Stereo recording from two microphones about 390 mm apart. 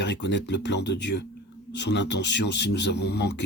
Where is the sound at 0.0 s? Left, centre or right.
Left.